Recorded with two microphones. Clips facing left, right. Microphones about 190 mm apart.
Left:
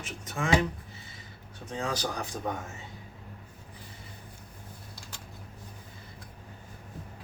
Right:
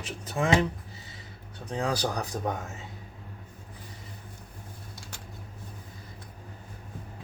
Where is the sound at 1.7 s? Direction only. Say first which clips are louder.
Right 4 dB; 35° right (ahead or behind).